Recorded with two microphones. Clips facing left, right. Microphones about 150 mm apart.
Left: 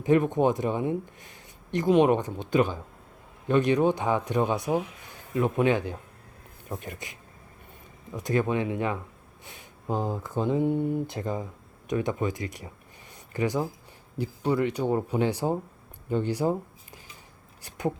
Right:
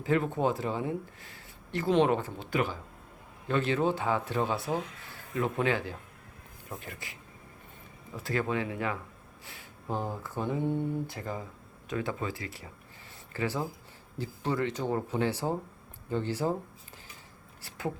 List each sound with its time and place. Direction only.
0.0 s speech: 20° left (ahead or behind)
17.6 s speech: 20° left (ahead or behind)